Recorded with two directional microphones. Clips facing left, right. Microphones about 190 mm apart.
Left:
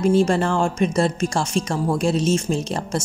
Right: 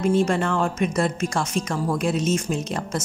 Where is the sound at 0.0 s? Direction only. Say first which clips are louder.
Left 3 dB; 35° left (ahead or behind).